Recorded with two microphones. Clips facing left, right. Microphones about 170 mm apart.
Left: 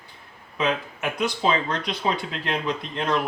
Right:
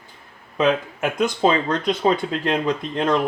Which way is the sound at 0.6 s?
45° right (ahead or behind).